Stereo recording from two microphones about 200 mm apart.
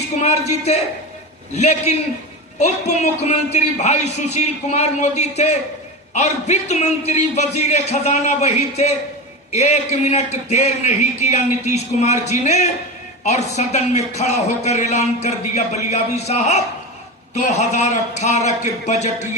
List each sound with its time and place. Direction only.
0.2 s a man's voice: 35° left (ahead or behind)